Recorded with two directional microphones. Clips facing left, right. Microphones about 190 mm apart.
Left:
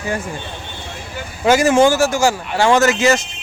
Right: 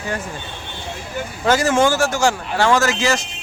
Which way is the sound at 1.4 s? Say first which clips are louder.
Left 4 dB; 15° left (ahead or behind).